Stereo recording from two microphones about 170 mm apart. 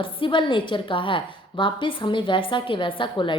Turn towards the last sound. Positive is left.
turn(degrees=30)  # may be behind; listen again after turning